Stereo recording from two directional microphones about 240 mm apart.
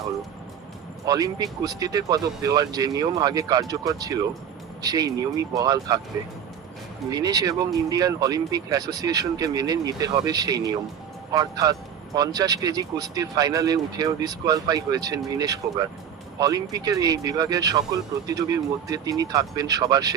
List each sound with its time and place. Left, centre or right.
1.0 s speech: centre
7.1 s speech: centre